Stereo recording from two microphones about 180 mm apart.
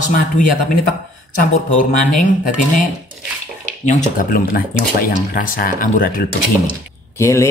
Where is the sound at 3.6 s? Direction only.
40° left (ahead or behind).